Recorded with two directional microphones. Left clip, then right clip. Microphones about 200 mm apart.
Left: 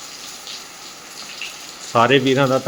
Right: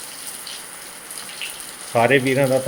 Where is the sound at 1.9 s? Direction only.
25° left (ahead or behind).